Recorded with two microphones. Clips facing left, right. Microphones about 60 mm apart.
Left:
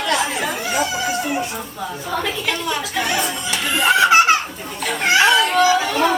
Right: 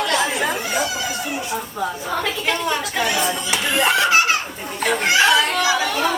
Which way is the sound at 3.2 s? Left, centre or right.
Centre.